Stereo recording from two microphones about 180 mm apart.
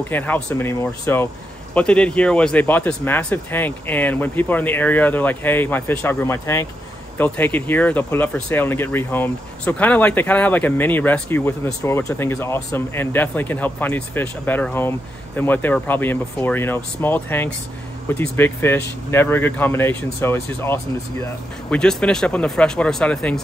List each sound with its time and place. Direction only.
0.1 s speech: 10° left (ahead or behind)